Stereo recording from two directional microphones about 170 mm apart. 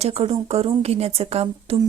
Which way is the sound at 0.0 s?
35° right (ahead or behind).